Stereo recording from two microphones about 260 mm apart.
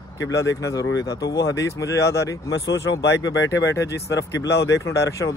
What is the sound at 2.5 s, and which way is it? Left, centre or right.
Speech, left.